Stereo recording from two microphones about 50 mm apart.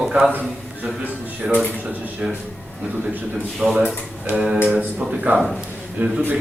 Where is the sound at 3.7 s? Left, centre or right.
Centre.